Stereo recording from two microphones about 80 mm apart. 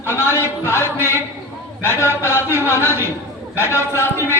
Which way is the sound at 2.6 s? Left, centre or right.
Right.